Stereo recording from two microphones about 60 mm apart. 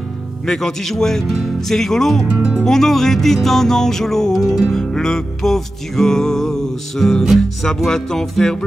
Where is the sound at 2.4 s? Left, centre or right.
Centre.